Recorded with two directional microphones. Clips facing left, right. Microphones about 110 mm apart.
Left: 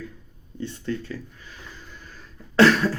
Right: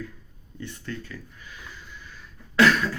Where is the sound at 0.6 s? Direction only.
25° left (ahead or behind).